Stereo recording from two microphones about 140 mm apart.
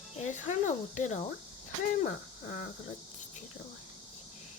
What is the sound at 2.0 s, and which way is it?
Speech, 70° left (ahead or behind).